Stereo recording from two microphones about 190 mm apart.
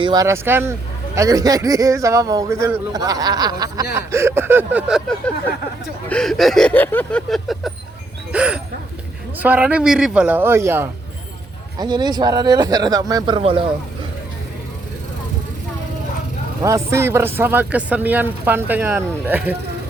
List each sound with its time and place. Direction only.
0.0 s speech: 20° right (ahead or behind)
16.6 s speech: 15° right (ahead or behind)